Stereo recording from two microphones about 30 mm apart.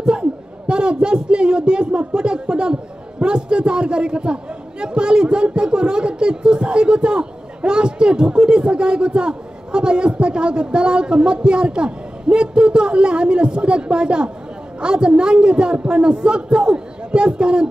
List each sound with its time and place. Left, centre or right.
0.0 s a man's voice: right